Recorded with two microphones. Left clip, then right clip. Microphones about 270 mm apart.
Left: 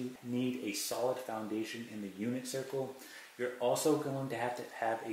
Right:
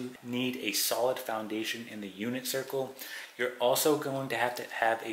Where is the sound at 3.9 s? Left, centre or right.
Centre.